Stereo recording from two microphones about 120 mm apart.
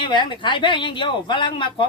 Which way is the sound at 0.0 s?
40° left (ahead or behind).